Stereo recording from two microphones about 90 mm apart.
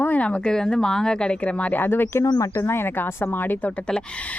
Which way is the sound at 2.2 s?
45° left (ahead or behind).